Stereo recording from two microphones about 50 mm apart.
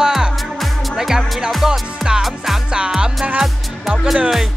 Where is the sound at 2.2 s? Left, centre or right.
Centre.